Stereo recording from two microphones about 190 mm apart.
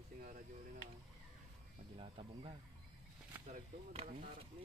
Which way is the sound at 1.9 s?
30° right (ahead or behind).